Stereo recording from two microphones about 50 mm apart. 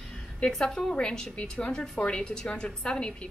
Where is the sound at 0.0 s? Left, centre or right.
Centre.